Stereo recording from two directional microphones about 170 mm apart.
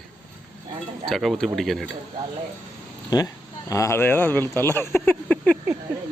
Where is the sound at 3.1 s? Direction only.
25° left (ahead or behind); by 5.6 s 10° left (ahead or behind).